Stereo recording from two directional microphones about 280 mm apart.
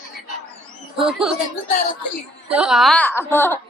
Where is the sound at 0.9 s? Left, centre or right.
Centre.